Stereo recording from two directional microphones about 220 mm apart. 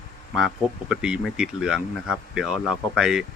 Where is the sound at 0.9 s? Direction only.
Centre (ahead or behind).